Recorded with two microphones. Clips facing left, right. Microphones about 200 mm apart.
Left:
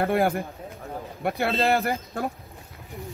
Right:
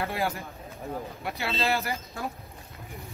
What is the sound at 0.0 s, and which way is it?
Speech, 55° left (ahead or behind).